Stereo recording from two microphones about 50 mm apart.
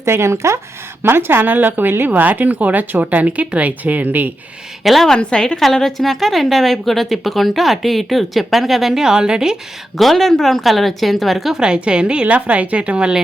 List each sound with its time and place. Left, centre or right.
0.0 s speech: right
1.0 s speech: right
4.8 s a woman's voice: centre
5.2 s a woman's voice: centre
5.6 s a woman's voice: centre
10.0 s a woman's voice: centre
11.5 s a woman's voice: centre